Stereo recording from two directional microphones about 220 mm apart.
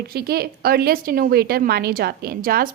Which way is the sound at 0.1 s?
45° right (ahead or behind).